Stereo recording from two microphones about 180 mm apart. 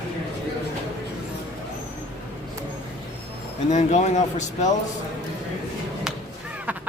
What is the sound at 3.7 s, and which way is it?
Speech, 40° left (ahead or behind).